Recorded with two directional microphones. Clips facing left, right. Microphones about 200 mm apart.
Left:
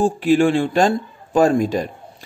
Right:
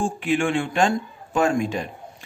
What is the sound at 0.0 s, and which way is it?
Speech, 35° left (ahead or behind).